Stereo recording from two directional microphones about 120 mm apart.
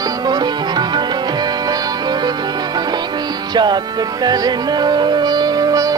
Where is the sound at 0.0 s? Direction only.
35° right (ahead or behind).